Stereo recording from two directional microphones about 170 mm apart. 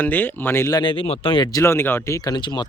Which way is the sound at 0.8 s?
30° left (ahead or behind).